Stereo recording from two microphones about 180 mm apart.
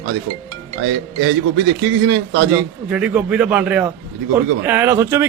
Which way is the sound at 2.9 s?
5° right (ahead or behind).